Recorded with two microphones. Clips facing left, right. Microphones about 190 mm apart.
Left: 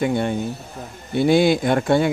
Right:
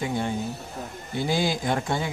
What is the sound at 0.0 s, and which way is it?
Speech, 65° left (ahead or behind).